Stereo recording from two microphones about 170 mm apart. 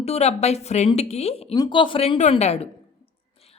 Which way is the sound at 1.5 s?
25° left (ahead or behind).